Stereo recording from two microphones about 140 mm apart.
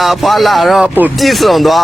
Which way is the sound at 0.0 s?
Centre (ahead or behind).